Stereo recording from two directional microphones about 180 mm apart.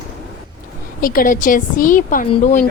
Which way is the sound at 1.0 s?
50° left (ahead or behind).